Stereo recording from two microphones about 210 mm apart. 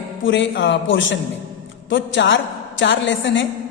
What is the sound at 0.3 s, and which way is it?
A man's voice, 60° left (ahead or behind).